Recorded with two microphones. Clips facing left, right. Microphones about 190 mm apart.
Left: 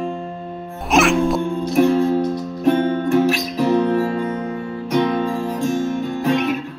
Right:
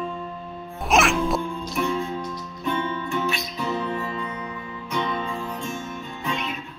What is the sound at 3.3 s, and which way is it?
Music, 90° left.